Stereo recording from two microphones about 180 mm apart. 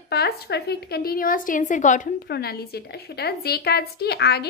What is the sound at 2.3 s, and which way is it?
A woman's voice, 60° left (ahead or behind).